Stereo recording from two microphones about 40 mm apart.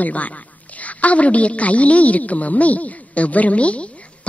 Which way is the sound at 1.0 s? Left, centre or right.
Left.